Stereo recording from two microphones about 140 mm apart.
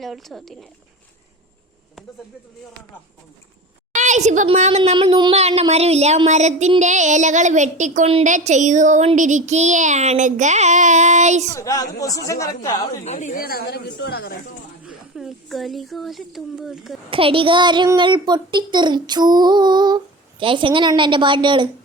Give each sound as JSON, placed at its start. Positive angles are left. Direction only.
{"t": 0.0, "sound": "speech", "side_deg": 0}
{"t": 3.9, "sound": "a sound", "side_deg": -60}
{"t": 4.5, "sound": "child singing", "side_deg": -55}
{"t": 4.9, "sound": "a sound", "side_deg": -35}
{"t": 5.4, "sound": "child singing", "side_deg": -45}
{"t": 11.5, "sound": "speech", "side_deg": 25}
{"t": 13.1, "sound": "a woman's voice", "side_deg": 60}
{"t": 14.8, "sound": "speech", "side_deg": -5}
{"t": 17.1, "sound": "a sound", "side_deg": -40}